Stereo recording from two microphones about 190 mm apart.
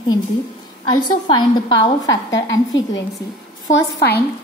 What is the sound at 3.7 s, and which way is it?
Speech, 60° left (ahead or behind).